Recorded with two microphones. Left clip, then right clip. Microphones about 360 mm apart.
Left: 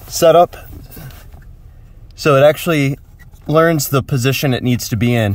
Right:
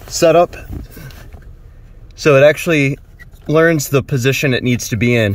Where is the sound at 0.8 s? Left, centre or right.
Centre.